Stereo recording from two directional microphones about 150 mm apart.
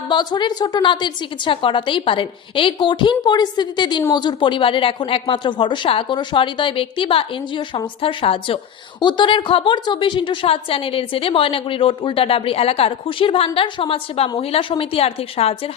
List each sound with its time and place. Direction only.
0.1 s a woman's voice: 30° left (ahead or behind)